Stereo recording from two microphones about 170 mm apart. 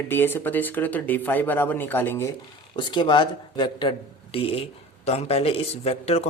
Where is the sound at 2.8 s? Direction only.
25° left (ahead or behind).